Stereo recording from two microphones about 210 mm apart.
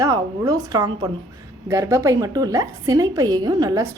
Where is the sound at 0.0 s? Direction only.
15° right (ahead or behind).